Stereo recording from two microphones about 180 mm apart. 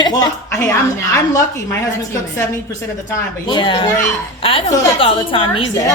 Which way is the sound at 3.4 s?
25° left (ahead or behind).